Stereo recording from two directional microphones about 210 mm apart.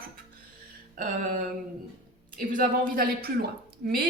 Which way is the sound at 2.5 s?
40° right (ahead or behind).